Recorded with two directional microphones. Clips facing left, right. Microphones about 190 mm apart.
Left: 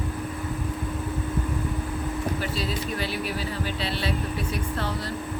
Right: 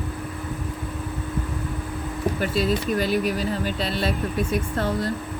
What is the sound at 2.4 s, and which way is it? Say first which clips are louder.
Speech: right 6 dB; 50° right (ahead or behind).